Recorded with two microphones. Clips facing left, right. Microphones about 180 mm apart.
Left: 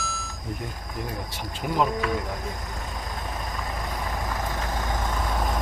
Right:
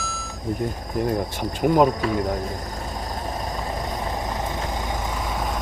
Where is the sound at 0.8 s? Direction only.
40° right (ahead or behind).